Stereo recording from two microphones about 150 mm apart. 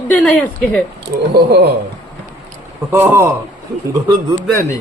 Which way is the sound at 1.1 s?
90° right.